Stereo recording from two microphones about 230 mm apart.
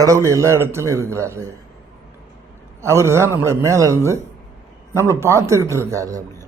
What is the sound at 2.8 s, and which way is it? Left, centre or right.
A man's voice, centre.